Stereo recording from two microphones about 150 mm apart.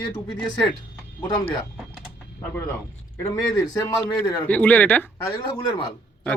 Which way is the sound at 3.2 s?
20° left (ahead or behind).